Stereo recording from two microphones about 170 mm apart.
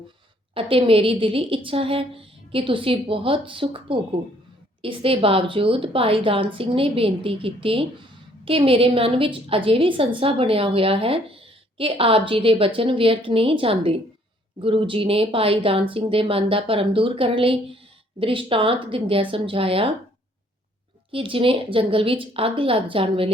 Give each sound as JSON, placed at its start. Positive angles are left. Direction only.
{"t": 0.5, "sound": "a woman's voice", "side_deg": -35}
{"t": 21.1, "sound": "a woman's voice", "side_deg": -30}